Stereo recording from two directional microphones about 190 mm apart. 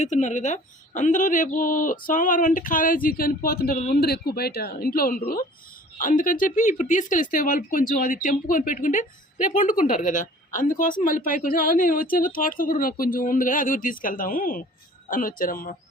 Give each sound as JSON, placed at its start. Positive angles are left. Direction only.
{"t": 0.0, "sound": "speech", "side_deg": 40}